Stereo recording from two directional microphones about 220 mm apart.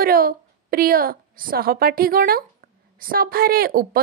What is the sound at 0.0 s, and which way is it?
A woman's voice, 40° right (ahead or behind).